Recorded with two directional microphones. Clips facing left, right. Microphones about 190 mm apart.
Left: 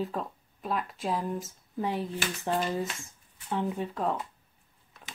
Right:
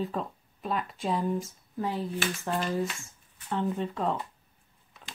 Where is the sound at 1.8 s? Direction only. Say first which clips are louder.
Right 1 dB; 15° left (ahead or behind).